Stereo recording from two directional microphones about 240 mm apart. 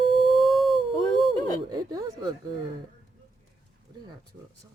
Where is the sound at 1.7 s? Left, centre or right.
Centre.